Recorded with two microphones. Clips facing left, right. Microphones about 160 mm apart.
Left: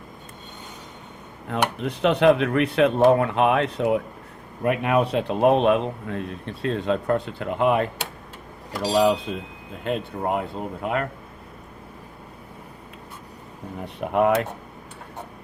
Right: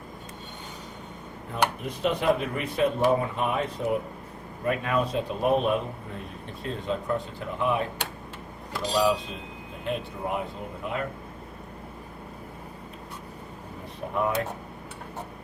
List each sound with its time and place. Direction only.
1.5 s speech: 80° left
9.8 s speech: 65° left (ahead or behind)
10.8 s speech: 80° left
13.8 s speech: 75° left (ahead or behind)